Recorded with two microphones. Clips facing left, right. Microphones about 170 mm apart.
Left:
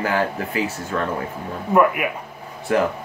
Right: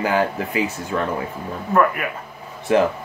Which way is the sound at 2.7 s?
20° right (ahead or behind).